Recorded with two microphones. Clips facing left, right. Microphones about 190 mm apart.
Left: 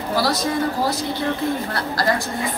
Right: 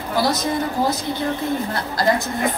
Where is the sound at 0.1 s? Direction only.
20° right (ahead or behind).